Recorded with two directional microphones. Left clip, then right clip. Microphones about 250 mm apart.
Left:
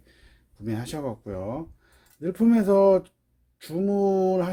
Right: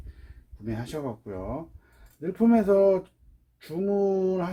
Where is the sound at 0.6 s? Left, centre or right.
Left.